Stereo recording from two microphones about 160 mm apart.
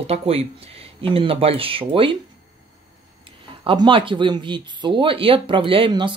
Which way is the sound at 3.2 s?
30° right (ahead or behind).